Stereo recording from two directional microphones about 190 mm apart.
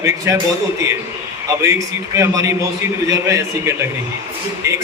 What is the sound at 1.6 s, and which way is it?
A man's voice, 15° right (ahead or behind).